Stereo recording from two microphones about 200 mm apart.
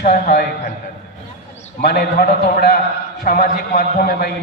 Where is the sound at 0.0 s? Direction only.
40° left (ahead or behind).